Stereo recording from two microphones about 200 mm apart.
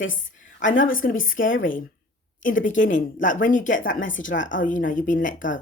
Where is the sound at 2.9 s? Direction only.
40° left (ahead or behind).